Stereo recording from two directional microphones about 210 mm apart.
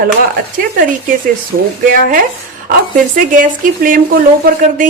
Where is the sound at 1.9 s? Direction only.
40° right (ahead or behind).